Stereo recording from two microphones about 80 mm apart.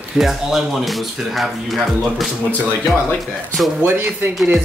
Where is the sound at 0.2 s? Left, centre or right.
Centre.